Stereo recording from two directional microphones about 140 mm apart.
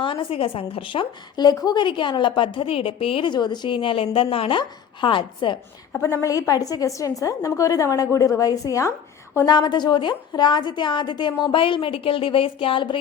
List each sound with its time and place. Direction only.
0.0 s a woman's voice: 40° left (ahead or behind)
5.9 s a woman's voice: 15° left (ahead or behind)
9.5 s a woman's voice: 30° left (ahead or behind)